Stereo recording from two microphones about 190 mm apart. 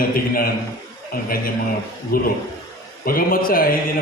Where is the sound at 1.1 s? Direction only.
50° left (ahead or behind).